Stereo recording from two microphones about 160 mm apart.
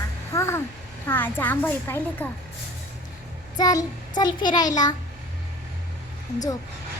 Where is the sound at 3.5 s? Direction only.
25° left (ahead or behind).